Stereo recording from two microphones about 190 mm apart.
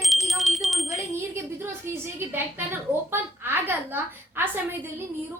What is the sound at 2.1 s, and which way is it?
A woman's voice, 10° right (ahead or behind).